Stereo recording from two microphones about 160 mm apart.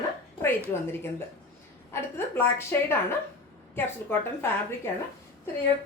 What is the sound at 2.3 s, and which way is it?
A woman's voice, 15° left (ahead or behind).